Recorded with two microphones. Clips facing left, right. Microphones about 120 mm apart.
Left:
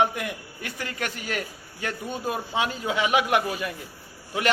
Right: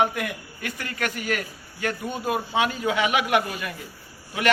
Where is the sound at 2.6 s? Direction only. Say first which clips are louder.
Right 2 dB; 30° left (ahead or behind).